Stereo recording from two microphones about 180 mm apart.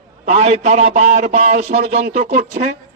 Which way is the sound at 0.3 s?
40° right (ahead or behind).